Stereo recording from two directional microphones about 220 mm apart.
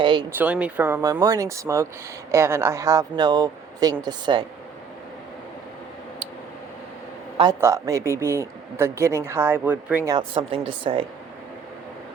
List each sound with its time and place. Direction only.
0.0 s speech: 20° right (ahead or behind)
0.3 s speech: 5° right (ahead or behind)
7.3 s speech: 15° right (ahead or behind)